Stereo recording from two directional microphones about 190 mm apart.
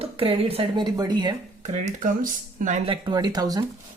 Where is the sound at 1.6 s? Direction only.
40° right (ahead or behind).